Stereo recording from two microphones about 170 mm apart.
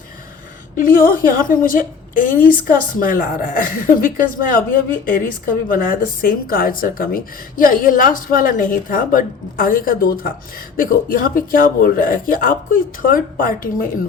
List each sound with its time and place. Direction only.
0.8 s a man's voice: 55° left (ahead or behind)